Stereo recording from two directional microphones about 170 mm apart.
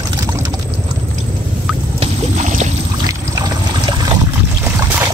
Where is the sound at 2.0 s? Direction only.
45° right (ahead or behind).